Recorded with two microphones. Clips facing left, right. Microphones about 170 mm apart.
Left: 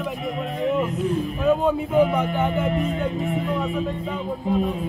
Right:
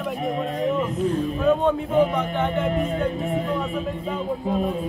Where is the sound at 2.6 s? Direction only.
40° right (ahead or behind).